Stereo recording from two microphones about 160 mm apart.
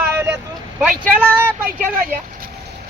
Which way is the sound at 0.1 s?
15° right (ahead or behind).